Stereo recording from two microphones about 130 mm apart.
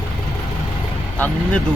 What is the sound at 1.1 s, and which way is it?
Speech, 15° left (ahead or behind).